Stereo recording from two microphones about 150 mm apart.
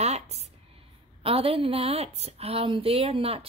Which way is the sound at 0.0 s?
45° right (ahead or behind).